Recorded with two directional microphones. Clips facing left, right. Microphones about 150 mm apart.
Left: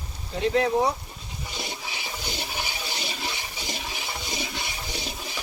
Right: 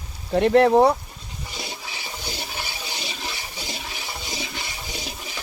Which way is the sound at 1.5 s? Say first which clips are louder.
Even; 5° right (ahead or behind).